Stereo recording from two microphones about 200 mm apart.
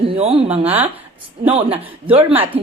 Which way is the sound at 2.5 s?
10° right (ahead or behind).